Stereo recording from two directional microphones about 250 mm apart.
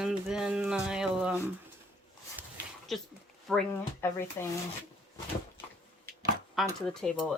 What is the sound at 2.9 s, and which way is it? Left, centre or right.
Speech, centre.